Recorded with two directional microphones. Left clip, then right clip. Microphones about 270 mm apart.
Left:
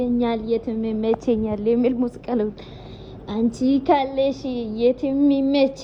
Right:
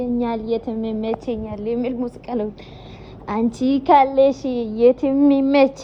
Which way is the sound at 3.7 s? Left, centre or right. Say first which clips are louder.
Right 6 dB; centre.